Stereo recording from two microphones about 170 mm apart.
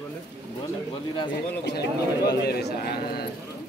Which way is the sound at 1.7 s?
70° left (ahead or behind).